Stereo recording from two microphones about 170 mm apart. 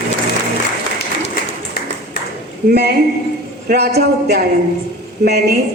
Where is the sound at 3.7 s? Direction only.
70° right (ahead or behind).